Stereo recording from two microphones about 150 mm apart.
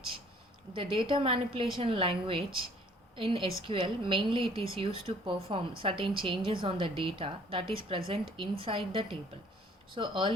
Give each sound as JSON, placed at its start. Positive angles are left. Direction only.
{"t": 0.7, "sound": "speech", "side_deg": -35}